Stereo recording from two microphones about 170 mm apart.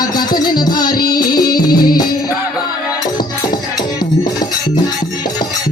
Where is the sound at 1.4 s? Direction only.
60° left (ahead or behind).